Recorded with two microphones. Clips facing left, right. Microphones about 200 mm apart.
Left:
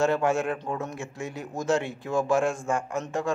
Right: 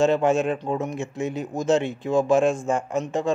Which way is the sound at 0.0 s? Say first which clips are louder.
Right 4 dB; 20° right (ahead or behind).